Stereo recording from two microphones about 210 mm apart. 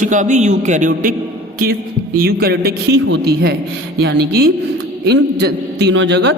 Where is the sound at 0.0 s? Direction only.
35° right (ahead or behind).